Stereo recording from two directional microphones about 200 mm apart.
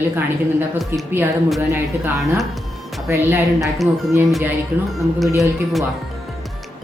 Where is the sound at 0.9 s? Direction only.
10° right (ahead or behind).